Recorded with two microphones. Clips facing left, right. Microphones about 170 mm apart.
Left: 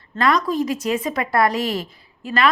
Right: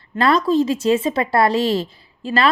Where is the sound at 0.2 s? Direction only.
30° right (ahead or behind).